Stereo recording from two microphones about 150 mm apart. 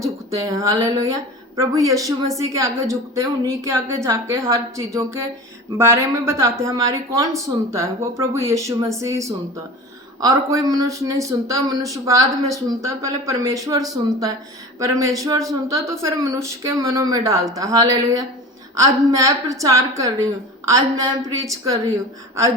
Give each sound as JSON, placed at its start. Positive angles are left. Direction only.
{"t": 0.0, "sound": "a woman's voice", "side_deg": -20}